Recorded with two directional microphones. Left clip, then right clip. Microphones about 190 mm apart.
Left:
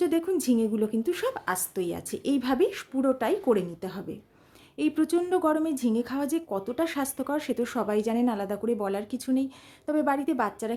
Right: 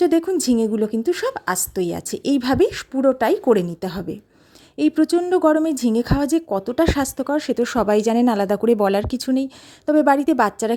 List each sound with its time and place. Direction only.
0.0 s a woman's voice: 40° right (ahead or behind)